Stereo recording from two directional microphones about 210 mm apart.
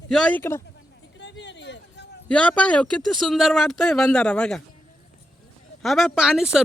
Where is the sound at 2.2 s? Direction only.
5° left (ahead or behind).